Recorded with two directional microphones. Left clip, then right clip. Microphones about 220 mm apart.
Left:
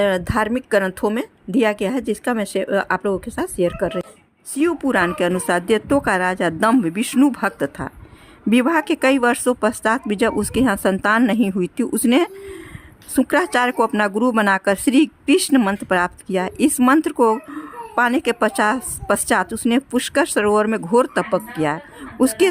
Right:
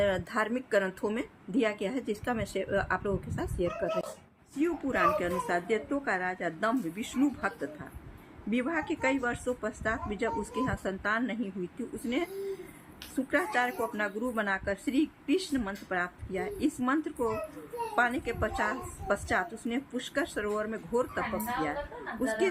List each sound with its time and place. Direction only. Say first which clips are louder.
0.0 s a woman's voice: left 10 dB; 40° left (ahead or behind)
4.5 s speech: left 12 dB; 50° left (ahead or behind)